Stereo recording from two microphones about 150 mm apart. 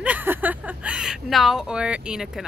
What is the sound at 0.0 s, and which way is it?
Speech, 10° right (ahead or behind).